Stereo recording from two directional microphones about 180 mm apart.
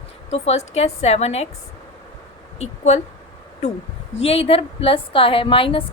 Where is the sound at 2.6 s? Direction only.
40° left (ahead or behind).